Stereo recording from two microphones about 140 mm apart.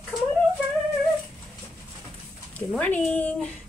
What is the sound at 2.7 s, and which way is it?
Speech, 10° left (ahead or behind).